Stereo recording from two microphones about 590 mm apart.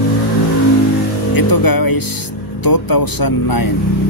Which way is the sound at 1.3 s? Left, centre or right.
Left.